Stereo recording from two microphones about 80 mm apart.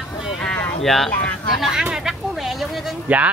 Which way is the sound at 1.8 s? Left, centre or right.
Centre.